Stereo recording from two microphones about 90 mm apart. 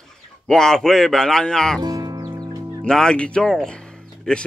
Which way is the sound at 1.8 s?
45° right (ahead or behind).